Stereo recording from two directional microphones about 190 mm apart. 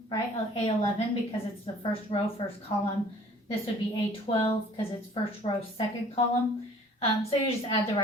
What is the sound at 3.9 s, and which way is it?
A woman's voice, 25° left (ahead or behind).